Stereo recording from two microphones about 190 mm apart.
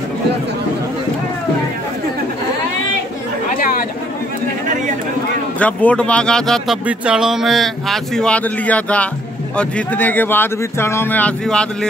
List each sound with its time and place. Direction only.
3.5 s chatter: 45° left (ahead or behind)
5.6 s speech: 5° left (ahead or behind)